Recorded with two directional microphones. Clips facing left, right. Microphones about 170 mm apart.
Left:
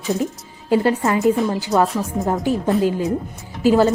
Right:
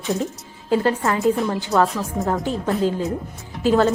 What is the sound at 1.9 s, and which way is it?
A woman's voice, 15° left (ahead or behind).